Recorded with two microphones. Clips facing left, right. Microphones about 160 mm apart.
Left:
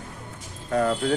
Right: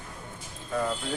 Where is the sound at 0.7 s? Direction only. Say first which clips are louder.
Left 7 dB; 75° left (ahead or behind).